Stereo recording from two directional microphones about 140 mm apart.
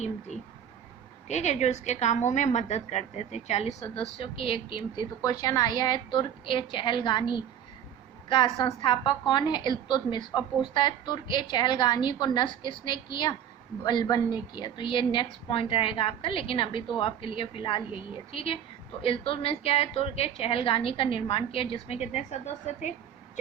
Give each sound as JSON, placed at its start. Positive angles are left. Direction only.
{"t": 1.3, "sound": "a woman's voice", "side_deg": 55}
{"t": 5.2, "sound": "a woman's voice", "side_deg": 25}